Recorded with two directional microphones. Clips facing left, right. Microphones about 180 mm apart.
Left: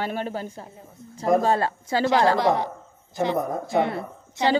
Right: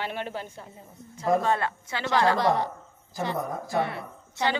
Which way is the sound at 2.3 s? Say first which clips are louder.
Left 2 dB; 15° left (ahead or behind).